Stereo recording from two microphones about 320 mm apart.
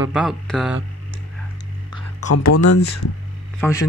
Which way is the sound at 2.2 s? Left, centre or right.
Left.